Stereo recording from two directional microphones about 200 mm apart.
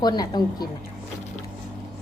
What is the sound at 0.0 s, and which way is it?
Speech, 20° left (ahead or behind).